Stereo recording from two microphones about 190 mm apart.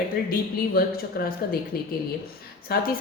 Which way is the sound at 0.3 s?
50° left (ahead or behind).